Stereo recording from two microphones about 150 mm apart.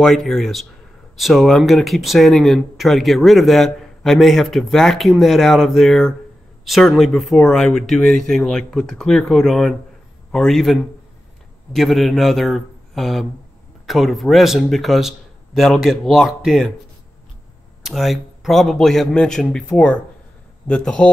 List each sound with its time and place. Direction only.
0.0 s speech: 5° left (ahead or behind)
17.8 s a man's voice: centre (ahead or behind)